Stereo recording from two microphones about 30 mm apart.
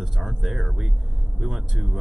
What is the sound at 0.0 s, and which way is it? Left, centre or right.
Speech, centre.